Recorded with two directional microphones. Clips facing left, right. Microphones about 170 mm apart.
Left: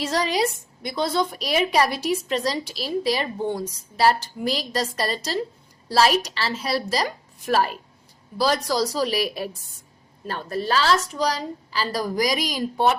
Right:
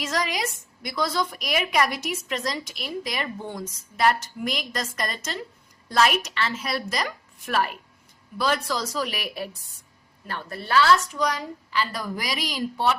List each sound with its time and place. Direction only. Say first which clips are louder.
0.0 s a woman's voice: left 5 dB; 30° left (ahead or behind)